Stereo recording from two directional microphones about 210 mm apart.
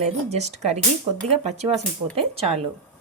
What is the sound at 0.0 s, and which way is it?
Speech, 30° right (ahead or behind).